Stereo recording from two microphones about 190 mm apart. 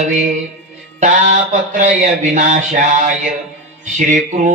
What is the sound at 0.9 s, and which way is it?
A man's voice, 40° right (ahead or behind).